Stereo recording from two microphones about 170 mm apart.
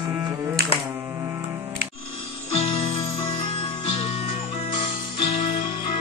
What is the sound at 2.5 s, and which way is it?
Music, 35° left (ahead or behind).